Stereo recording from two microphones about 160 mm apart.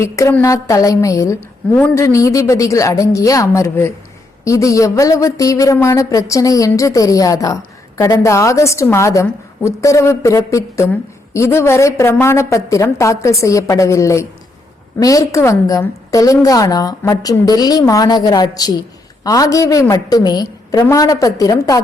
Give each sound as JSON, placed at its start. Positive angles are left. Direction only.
{"t": 0.0, "sound": "a woman's voice", "side_deg": 15}